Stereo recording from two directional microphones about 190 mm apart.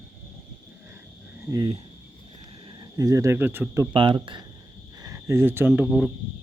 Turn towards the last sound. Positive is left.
turn(degrees=0)  # may be behind; listen again after turning